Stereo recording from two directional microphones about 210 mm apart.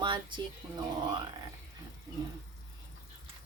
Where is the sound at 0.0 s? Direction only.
20° right (ahead or behind).